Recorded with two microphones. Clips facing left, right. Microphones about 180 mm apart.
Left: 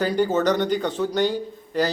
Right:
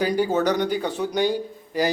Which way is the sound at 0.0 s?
10° right (ahead or behind).